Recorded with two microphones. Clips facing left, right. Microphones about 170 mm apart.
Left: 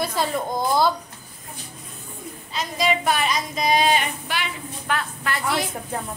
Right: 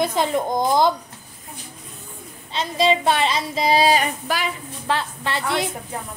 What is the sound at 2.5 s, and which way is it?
Speech, 30° right (ahead or behind).